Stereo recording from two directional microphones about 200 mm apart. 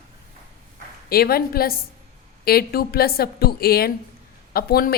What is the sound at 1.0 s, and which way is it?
A woman's voice, 50° left (ahead or behind).